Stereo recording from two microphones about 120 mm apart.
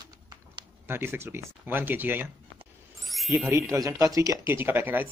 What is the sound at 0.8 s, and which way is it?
Speech, 20° right (ahead or behind).